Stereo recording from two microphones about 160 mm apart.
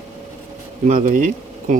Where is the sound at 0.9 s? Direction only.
55° right (ahead or behind).